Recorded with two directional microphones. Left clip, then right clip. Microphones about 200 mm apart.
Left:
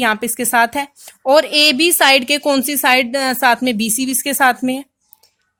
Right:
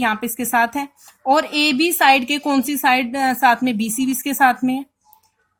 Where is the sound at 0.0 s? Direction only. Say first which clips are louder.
Left 4 dB; 45° left (ahead or behind).